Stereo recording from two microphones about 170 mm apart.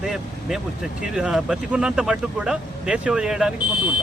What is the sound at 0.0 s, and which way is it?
Vehicle, 5° right (ahead or behind).